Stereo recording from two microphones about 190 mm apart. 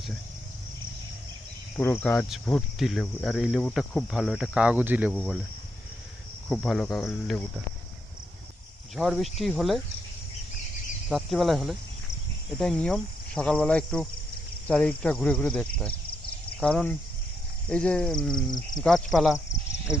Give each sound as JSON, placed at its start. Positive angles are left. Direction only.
{"t": 1.7, "sound": "cricket", "side_deg": 10}
{"t": 6.5, "sound": "cricket", "side_deg": 5}
{"t": 9.0, "sound": "cricket", "side_deg": 0}
{"t": 11.1, "sound": "cricket", "side_deg": 0}
{"t": 18.3, "sound": "speech", "side_deg": 20}
{"t": 18.8, "sound": "cricket", "side_deg": 0}
{"t": 19.9, "sound": "speech", "side_deg": 15}